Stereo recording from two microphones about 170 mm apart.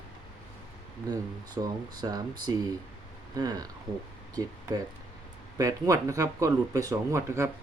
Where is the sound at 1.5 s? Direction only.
25° right (ahead or behind).